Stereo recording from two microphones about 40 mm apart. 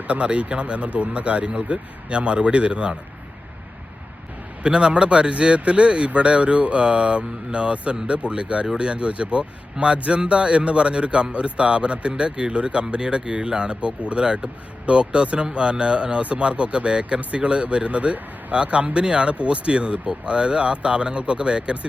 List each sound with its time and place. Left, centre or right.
0.1 s speech: right
4.6 s speech: right
8.9 s speech: right